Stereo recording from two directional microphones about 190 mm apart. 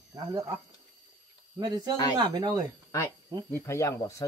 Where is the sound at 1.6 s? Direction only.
20° right (ahead or behind).